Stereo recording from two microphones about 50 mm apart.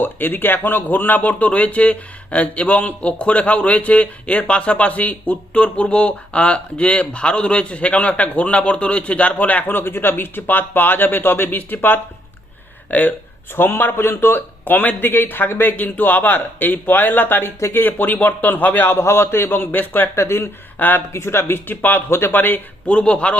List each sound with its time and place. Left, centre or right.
0.0 s speech: left
13.6 s a man's voice: left
14.6 s a man's voice: left
15.7 s speech: left
18.9 s a man's voice: left
20.1 s speech: left
20.7 s speech: left
21.1 s speech: left
21.8 s a man's voice: left
22.9 s speech: left